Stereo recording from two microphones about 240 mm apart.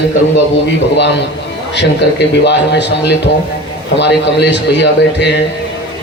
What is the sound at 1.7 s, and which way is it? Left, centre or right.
A man's voice, left.